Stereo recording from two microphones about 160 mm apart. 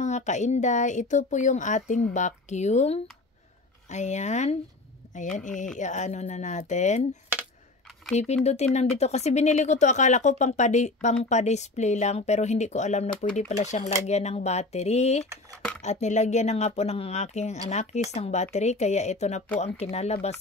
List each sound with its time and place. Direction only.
0.0 s speech: 45° left (ahead or behind)
5.8 s speech: 50° left (ahead or behind)
8.2 s speech: 45° left (ahead or behind)